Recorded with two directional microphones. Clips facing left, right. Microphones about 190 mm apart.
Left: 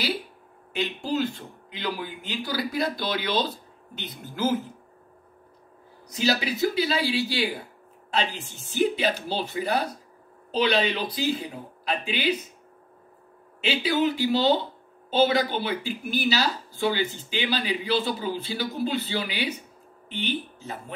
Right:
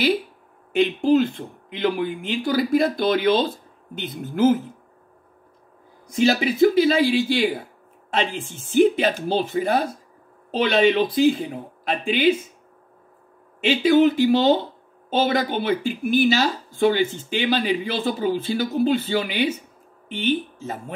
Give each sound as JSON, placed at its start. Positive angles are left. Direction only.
{"t": 0.7, "sound": "speech", "side_deg": -55}
{"t": 6.2, "sound": "speech", "side_deg": -50}
{"t": 13.7, "sound": "speech", "side_deg": -50}